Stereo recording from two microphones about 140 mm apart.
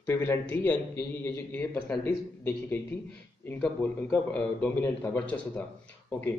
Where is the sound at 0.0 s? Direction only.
15° left (ahead or behind).